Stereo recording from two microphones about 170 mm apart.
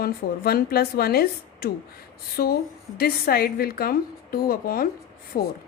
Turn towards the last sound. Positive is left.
turn(degrees=55)  # may be behind; listen again after turning